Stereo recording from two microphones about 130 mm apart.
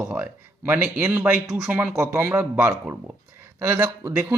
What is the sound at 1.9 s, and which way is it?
Speech, 20° right (ahead or behind).